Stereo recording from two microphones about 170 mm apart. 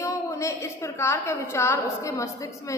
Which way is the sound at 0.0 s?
15° left (ahead or behind).